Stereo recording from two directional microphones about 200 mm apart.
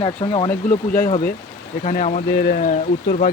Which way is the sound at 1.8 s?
35° left (ahead or behind).